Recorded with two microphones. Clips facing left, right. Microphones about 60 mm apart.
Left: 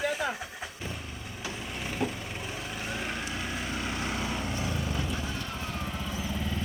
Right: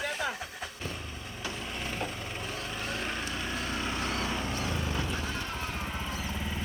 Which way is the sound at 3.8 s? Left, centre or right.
Right.